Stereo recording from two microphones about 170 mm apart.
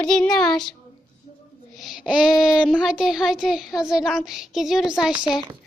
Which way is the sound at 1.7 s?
Centre (ahead or behind).